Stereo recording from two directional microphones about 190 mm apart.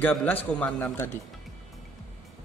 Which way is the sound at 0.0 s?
10° left (ahead or behind).